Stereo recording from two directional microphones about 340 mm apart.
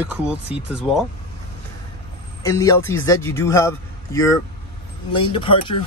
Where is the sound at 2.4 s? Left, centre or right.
Centre.